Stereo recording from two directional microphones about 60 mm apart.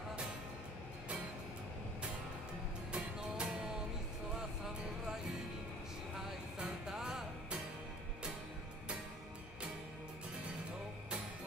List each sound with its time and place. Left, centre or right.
2.9 s music: centre
6.6 s music: centre